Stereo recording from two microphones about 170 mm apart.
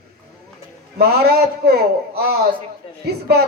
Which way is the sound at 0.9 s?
70° right (ahead or behind).